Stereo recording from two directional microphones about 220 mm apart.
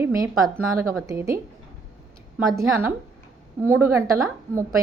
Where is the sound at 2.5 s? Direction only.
10° right (ahead or behind).